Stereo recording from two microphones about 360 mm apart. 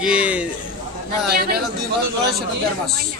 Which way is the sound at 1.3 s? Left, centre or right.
Right.